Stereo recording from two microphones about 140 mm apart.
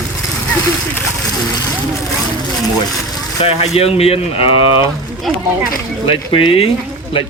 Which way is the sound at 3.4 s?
45° left (ahead or behind).